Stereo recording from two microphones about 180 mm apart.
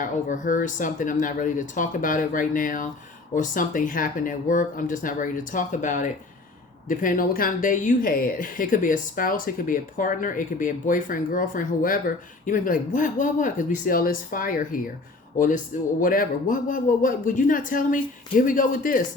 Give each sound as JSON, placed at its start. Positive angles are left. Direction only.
{"t": 0.0, "sound": "speech", "side_deg": 45}